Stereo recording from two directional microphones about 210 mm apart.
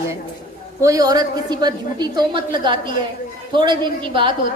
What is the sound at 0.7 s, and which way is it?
A woman's voice, 15° right (ahead or behind).